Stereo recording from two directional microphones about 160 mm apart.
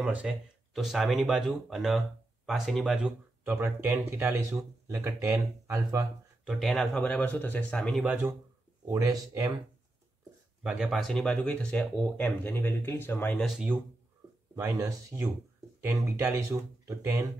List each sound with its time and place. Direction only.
0.0 s speech: 10° right (ahead or behind)
6.4 s speech: centre (ahead or behind)
8.0 s speech: 5° right (ahead or behind)
8.9 s speech: 20° right (ahead or behind)
10.6 s speech: 5° right (ahead or behind); by 13.4 s 10° left (ahead or behind)
13.4 s speech: 5° right (ahead or behind)
14.5 s speech: 20° right (ahead or behind)